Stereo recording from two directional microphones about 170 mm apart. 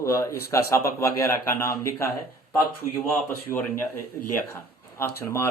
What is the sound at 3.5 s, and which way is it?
Speech, 15° left (ahead or behind).